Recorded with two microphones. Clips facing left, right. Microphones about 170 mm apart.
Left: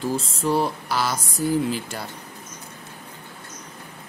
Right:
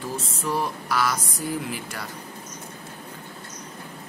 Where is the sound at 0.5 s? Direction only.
30° left (ahead or behind).